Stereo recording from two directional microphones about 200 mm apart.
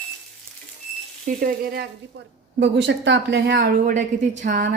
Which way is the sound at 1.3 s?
45° right (ahead or behind).